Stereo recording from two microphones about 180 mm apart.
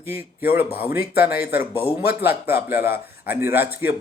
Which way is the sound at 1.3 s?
60° left (ahead or behind).